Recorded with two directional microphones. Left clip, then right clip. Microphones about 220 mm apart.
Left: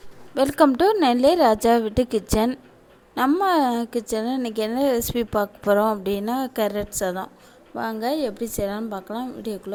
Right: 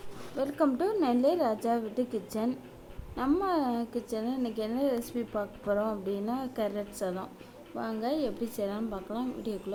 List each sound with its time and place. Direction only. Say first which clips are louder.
0.3 s a woman's voice: left 11 dB; 45° left (ahead or behind)